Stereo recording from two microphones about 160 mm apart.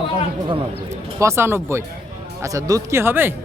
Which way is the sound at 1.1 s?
15° right (ahead or behind).